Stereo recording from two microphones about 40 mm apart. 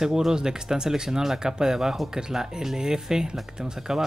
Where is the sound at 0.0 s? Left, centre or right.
Centre.